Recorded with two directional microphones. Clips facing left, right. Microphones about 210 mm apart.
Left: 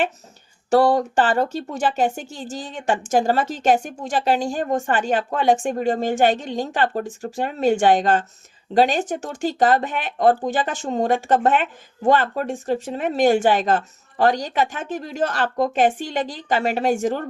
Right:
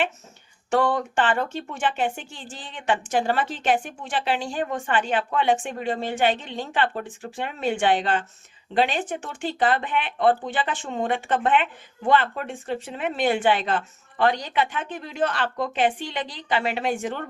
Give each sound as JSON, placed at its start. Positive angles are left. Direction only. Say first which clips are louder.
{"t": 0.7, "sound": "speech", "louder": "left 6 dB", "side_deg": 40}